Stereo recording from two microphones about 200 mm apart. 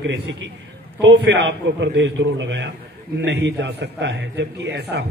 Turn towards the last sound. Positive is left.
turn(degrees=-60)  # may be behind; listen again after turning